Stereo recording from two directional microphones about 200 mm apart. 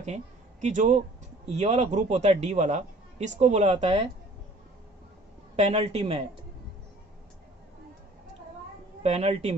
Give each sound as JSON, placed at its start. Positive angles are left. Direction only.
{"t": 0.0, "sound": "a man's voice", "side_deg": -35}
{"t": 5.6, "sound": "a man's voice", "side_deg": -30}
{"t": 9.0, "sound": "a man's voice", "side_deg": -30}